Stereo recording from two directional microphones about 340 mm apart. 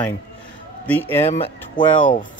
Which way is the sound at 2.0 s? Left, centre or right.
Left.